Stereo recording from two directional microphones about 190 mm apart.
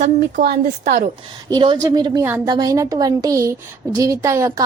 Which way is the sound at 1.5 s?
20° right (ahead or behind).